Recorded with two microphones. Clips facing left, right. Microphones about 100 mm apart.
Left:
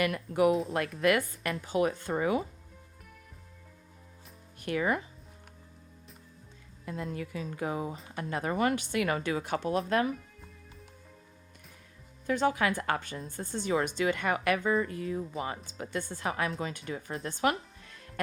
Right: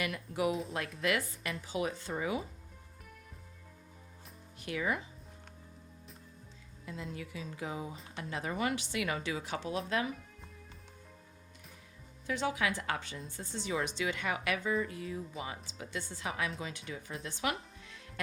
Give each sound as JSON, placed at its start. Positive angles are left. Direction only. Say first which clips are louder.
{"t": 0.0, "sound": "speech", "louder": "left 7 dB", "side_deg": 55}
{"t": 4.6, "sound": "speech", "louder": "left 5 dB", "side_deg": 50}
{"t": 6.8, "sound": "speech", "louder": "left 6 dB", "side_deg": 50}
{"t": 12.2, "sound": "speech", "louder": "left 6 dB", "side_deg": 50}